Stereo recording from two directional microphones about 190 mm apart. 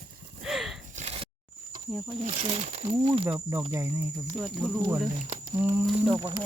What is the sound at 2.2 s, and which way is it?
Speech, 35° right (ahead or behind).